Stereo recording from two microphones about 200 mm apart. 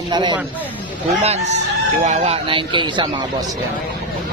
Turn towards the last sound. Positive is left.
turn(degrees=-25)  # may be behind; listen again after turning